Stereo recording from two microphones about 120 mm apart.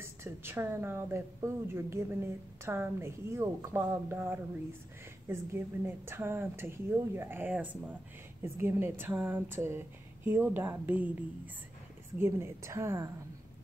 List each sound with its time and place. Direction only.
0.0 s speech: 20° right (ahead or behind)